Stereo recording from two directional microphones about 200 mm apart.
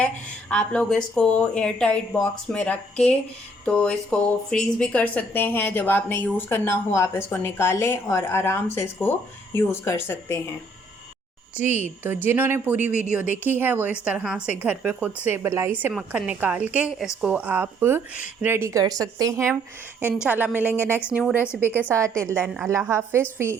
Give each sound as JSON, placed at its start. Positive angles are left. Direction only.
{"t": 0.5, "sound": "speech", "side_deg": 5}
{"t": 11.7, "sound": "a woman's voice", "side_deg": -10}